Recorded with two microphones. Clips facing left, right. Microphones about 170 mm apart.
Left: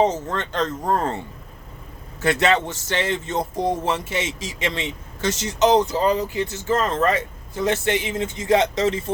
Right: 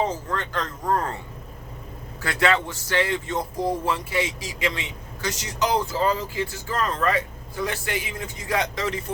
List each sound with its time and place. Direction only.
0.0 s speech: 25° left (ahead or behind)
2.2 s speech: 25° left (ahead or behind)